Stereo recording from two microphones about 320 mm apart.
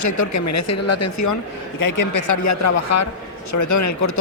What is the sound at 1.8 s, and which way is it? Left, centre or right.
Speech, left.